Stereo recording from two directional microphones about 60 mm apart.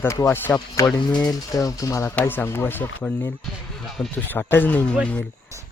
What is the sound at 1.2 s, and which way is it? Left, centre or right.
Speech, left.